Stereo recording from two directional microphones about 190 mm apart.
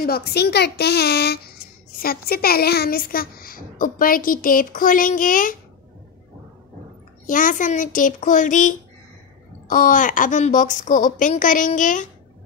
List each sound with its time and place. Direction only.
0.0 s a woman's voice: 55° left (ahead or behind)
7.2 s speech: 45° left (ahead or behind)